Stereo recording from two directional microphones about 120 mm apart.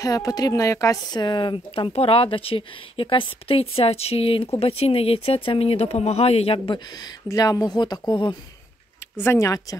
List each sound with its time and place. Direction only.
0.0 s a woman's voice: 30° left (ahead or behind)
1.2 s speech: 40° left (ahead or behind)
6.9 s speech: 35° left (ahead or behind)
9.2 s a woman's voice: 25° left (ahead or behind)